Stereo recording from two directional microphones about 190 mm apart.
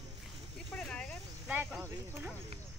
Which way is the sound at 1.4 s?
10° right (ahead or behind).